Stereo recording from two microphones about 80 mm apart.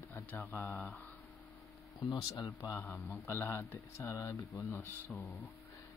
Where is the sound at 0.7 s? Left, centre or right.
Centre.